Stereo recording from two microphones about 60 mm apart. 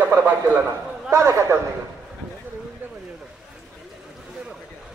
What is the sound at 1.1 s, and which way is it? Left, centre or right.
Speech, right.